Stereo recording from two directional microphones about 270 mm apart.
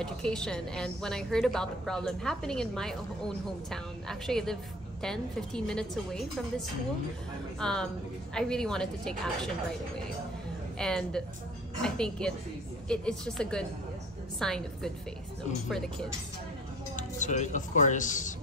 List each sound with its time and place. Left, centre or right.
0.0 s a woman's voice: centre
7.5 s a woman's voice: centre
10.8 s a woman's voice: centre
16.9 s speech: left